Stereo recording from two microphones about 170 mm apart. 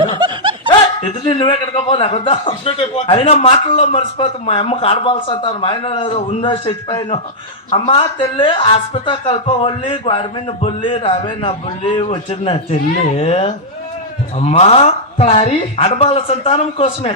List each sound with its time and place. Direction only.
0.2 s snicker: 30° right (ahead or behind)
1.0 s speech: 35° left (ahead or behind)